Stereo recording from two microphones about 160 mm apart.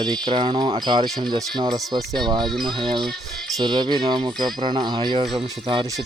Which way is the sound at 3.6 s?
30° right (ahead or behind).